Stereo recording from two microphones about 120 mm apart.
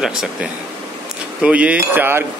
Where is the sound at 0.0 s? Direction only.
5° right (ahead or behind).